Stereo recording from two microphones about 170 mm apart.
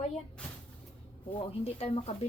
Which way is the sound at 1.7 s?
35° left (ahead or behind).